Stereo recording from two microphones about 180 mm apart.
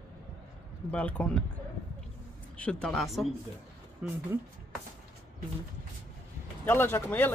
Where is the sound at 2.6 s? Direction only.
5° left (ahead or behind).